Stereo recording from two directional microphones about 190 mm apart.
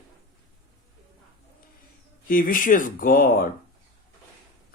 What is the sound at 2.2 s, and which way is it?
Speech, 50° left (ahead or behind).